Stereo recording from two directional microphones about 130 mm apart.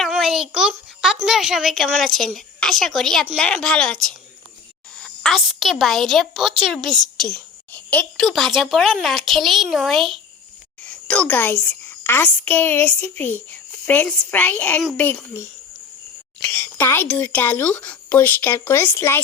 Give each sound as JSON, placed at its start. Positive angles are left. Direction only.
{"t": 0.0, "sound": "a sound", "side_deg": 0}
{"t": 1.0, "sound": "a woman's voice", "side_deg": -5}
{"t": 7.3, "sound": "speech", "side_deg": 10}
{"t": 10.8, "sound": "a woman's voice", "side_deg": 10}
{"t": 16.5, "sound": "a sound", "side_deg": 15}
{"t": 17.1, "sound": "speech", "side_deg": 15}